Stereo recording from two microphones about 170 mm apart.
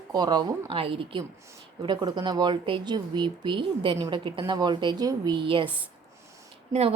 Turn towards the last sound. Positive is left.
turn(degrees=-40)  # may be behind; listen again after turning